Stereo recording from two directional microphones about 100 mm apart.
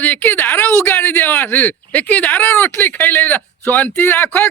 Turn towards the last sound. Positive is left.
turn(degrees=20)  # may be behind; listen again after turning